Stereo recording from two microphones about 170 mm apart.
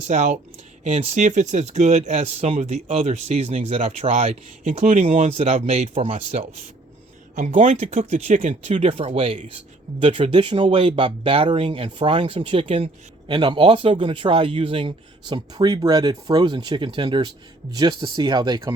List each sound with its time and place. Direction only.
0.1 s speech: 45° right (ahead or behind)
8.7 s speech: 30° right (ahead or behind)